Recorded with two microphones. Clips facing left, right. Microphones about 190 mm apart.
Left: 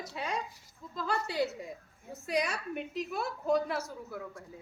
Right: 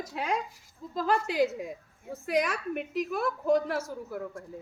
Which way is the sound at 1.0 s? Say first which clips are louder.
Right 6 dB; 90° right.